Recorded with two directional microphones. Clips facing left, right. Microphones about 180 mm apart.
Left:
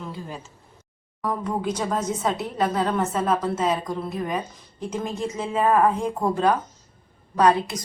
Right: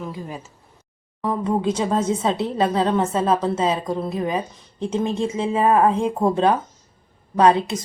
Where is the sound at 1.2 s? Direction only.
25° right (ahead or behind).